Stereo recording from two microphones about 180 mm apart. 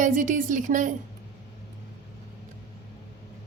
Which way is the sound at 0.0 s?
45° right (ahead or behind).